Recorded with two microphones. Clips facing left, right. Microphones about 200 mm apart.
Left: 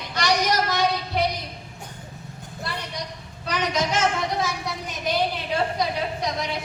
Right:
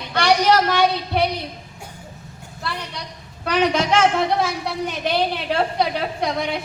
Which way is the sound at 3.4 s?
60° right (ahead or behind).